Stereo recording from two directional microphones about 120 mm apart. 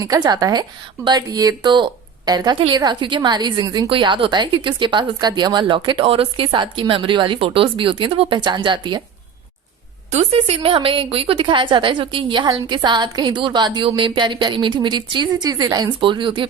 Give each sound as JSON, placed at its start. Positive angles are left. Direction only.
{"t": 0.0, "sound": "a woman's voice", "side_deg": -30}
{"t": 10.1, "sound": "a woman's voice", "side_deg": -55}